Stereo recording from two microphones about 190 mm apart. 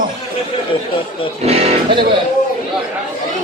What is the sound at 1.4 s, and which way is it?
Speech, 35° right (ahead or behind).